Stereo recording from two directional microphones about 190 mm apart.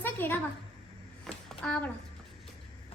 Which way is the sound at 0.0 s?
10° left (ahead or behind).